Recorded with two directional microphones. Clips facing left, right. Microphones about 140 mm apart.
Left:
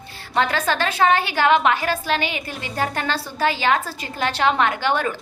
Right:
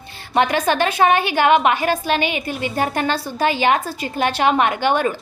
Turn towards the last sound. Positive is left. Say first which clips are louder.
# right 3 dB
turn(degrees=-15)  # may be behind; listen again after turning